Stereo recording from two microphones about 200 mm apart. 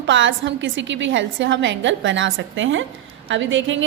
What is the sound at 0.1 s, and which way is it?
A woman's voice, 70° right (ahead or behind).